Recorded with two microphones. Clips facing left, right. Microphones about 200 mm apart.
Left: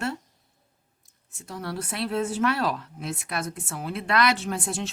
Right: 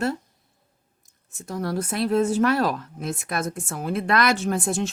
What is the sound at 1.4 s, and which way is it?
A woman's voice, 45° right (ahead or behind).